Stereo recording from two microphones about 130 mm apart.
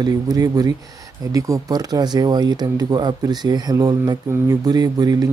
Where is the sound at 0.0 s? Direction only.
30° right (ahead or behind).